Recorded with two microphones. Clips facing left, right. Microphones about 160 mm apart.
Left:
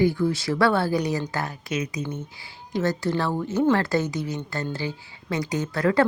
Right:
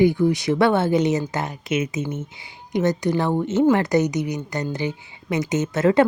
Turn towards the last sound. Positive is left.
turn(degrees=-20)  # may be behind; listen again after turning